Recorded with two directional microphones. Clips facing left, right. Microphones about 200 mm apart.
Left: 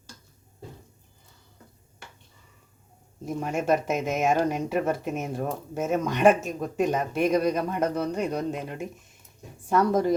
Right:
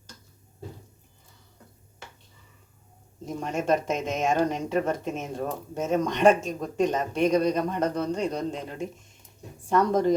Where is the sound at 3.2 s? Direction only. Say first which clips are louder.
Left 1 dB; 10° left (ahead or behind).